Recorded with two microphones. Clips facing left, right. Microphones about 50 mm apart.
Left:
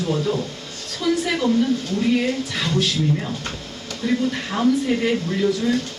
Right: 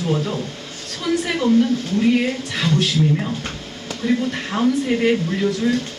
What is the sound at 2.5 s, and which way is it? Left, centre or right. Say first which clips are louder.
Speech: right 5 dB; centre.